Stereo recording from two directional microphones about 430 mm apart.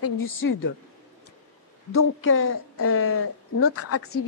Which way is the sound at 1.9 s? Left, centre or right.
Left.